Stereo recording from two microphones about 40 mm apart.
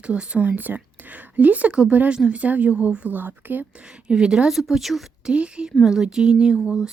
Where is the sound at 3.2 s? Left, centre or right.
Right.